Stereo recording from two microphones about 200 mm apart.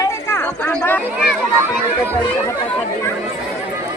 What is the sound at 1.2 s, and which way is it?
Speech, 10° right (ahead or behind).